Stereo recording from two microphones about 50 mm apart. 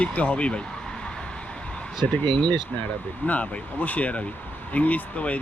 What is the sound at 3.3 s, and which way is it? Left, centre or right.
Speech, left.